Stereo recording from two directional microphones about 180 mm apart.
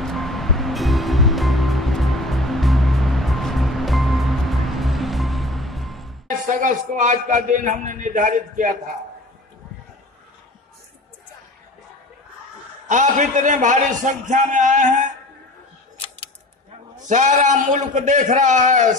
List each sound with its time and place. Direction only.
0.0 s music: centre (ahead or behind)
6.4 s a man's voice: 45° right (ahead or behind)
12.8 s a man's voice: 45° right (ahead or behind)
17.1 s a man's voice: 45° right (ahead or behind)